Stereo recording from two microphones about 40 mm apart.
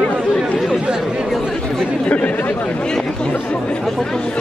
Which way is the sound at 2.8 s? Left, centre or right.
Left.